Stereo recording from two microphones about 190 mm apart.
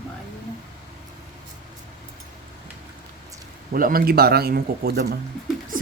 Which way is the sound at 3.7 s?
45° right (ahead or behind).